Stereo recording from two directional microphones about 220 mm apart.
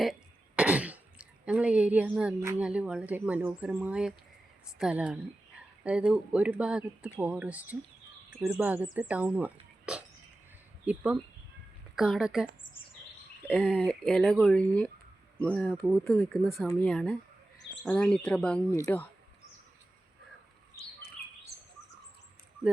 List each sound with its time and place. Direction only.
0.0 s speech: 5° right (ahead or behind)
13.5 s speech: centre (ahead or behind)
21.2 s bird: 40° left (ahead or behind)